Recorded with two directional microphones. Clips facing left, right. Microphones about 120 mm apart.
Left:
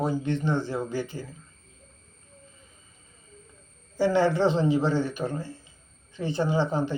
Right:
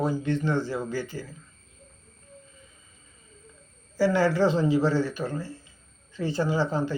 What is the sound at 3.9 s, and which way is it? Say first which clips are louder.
Speech: even; 20° left (ahead or behind).